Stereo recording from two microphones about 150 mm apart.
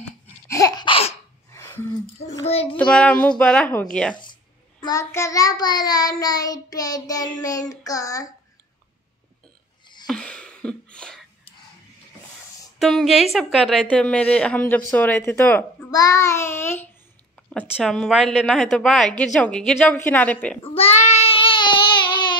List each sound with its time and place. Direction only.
0.5 s a sound: 25° left (ahead or behind)
1.5 s a sound: 15° left (ahead or behind)
2.4 s a child's voice: 40° left (ahead or behind)
2.7 s speech: 5° left (ahead or behind)
4.2 s child singing: 30° left (ahead or behind)
10.0 s a sound: 5° left (ahead or behind)
12.7 s a woman's voice: centre (ahead or behind)
13.8 s speech: 10° left (ahead or behind)
15.9 s child singing: 25° left (ahead or behind)
17.7 s a woman's voice: centre (ahead or behind)
20.6 s child singing: 40° left (ahead or behind)